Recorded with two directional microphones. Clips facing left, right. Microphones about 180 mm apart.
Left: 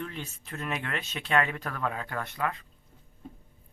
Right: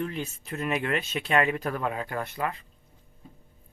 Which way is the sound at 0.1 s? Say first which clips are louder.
Right 6 dB; 10° right (ahead or behind).